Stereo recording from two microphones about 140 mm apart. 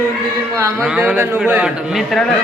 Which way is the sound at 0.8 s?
10° right (ahead or behind).